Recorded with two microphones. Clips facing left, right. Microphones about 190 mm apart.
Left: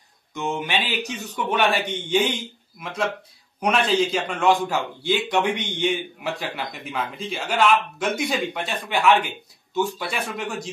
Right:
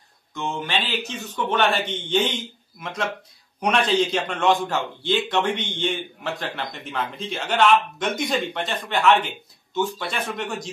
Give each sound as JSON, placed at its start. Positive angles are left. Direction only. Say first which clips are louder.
{"t": 0.3, "sound": "a man's voice", "louder": "left 1 dB", "side_deg": 20}